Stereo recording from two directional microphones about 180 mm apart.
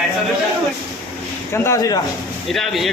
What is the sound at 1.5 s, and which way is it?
Speech, 15° left (ahead or behind).